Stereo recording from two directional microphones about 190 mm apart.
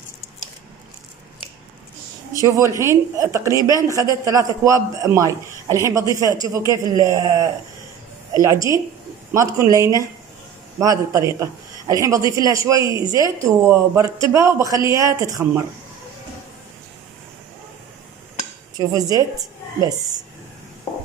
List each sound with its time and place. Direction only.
2.4 s a woman's voice: 15° right (ahead or behind)
18.8 s a woman's voice: 20° right (ahead or behind)